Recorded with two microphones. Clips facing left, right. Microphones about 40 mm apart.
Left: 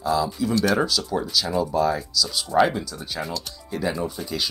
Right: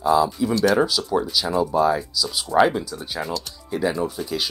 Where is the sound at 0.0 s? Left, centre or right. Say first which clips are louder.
Right 5 dB; centre.